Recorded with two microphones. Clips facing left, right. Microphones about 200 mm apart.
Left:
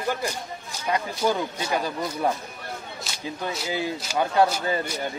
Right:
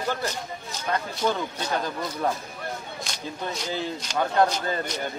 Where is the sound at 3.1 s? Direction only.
5° left (ahead or behind).